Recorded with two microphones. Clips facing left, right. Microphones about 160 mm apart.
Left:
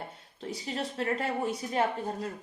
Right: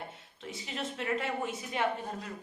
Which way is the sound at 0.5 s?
35° left (ahead or behind).